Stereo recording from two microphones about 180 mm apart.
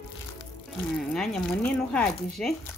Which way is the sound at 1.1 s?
5° left (ahead or behind).